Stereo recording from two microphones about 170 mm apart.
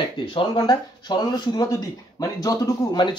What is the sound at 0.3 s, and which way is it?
Speech, 30° left (ahead or behind).